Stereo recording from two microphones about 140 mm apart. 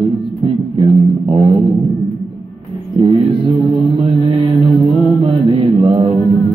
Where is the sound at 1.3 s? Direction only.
40° right (ahead or behind).